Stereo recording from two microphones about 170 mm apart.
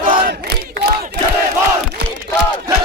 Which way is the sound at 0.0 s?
55° right (ahead or behind).